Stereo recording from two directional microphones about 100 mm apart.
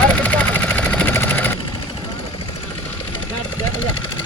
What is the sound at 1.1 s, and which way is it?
Vehicle, 20° left (ahead or behind).